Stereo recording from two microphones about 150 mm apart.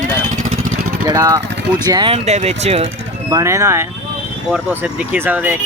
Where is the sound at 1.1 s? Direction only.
20° right (ahead or behind).